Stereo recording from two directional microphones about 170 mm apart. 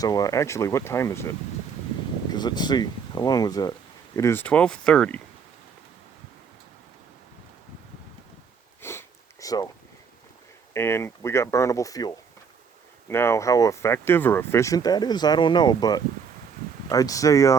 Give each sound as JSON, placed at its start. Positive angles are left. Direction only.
{"t": 0.0, "sound": "speech", "side_deg": 20}
{"t": 8.8, "sound": "sniff", "side_deg": 15}
{"t": 10.8, "sound": "speech", "side_deg": 15}